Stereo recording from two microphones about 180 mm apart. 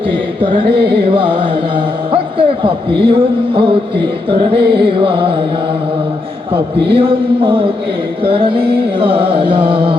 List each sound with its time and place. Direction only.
0.4 s a sound: 25° right (ahead or behind)
0.7 s carnatic music: 65° right (ahead or behind)
1.1 s carnatic music: 30° right (ahead or behind)
2.1 s a man's voice: 30° right (ahead or behind)
4.7 s music: 30° right (ahead or behind)
6.5 s music: 30° right (ahead or behind)